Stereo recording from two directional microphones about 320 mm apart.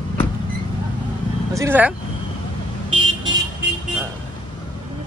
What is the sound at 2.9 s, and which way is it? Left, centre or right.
Vehicle, centre.